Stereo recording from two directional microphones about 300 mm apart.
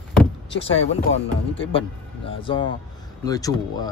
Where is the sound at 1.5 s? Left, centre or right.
Centre.